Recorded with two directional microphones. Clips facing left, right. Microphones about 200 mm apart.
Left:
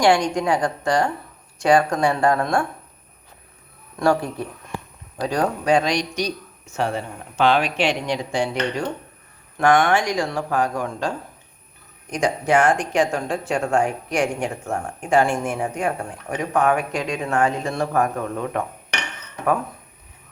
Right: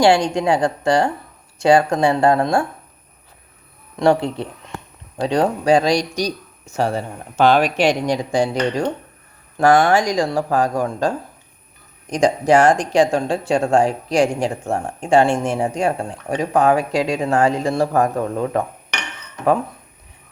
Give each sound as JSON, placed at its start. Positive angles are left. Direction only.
{"t": 0.0, "sound": "speech", "side_deg": -25}
{"t": 4.0, "sound": "speech", "side_deg": -25}
{"t": 12.1, "sound": "speech", "side_deg": -35}